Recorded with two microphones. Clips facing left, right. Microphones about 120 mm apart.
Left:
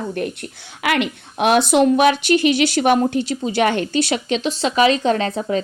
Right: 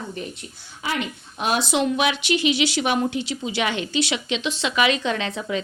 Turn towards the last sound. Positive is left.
turn(degrees=40)  # may be behind; listen again after turning